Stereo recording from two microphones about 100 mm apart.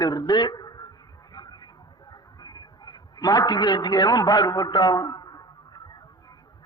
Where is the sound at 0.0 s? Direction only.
40° left (ahead or behind).